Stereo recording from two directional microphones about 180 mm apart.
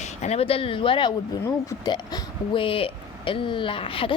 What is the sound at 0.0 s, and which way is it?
A woman's voice, 40° left (ahead or behind).